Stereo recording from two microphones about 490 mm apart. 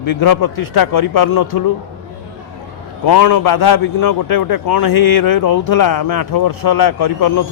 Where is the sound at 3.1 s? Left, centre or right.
Left.